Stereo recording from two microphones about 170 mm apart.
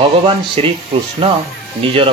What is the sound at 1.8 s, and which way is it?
Speech, 35° right (ahead or behind).